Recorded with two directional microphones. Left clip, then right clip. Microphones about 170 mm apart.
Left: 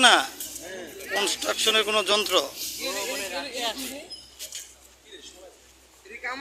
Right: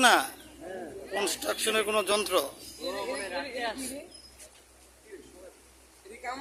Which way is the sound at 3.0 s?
10° left (ahead or behind).